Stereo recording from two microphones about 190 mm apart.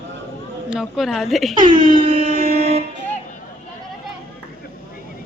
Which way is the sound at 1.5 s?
25° right (ahead or behind).